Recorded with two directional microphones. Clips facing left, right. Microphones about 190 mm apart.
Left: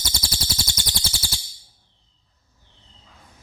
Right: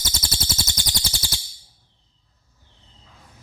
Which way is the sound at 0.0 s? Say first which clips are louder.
Even; 25° right (ahead or behind).